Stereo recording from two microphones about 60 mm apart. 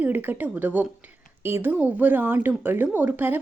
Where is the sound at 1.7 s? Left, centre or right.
Right.